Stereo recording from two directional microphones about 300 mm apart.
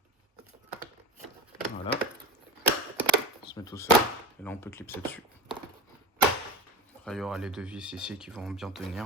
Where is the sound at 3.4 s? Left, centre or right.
Centre.